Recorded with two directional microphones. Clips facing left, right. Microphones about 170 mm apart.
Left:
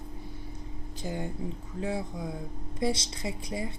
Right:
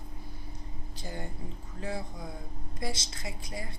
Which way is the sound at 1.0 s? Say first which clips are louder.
Left 6 dB; 15° left (ahead or behind).